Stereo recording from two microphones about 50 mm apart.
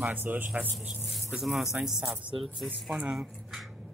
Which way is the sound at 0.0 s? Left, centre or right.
Right.